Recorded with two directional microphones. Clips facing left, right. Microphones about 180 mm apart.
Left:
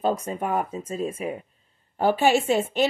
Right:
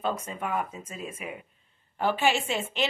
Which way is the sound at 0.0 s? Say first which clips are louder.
Left 6 dB; 40° left (ahead or behind).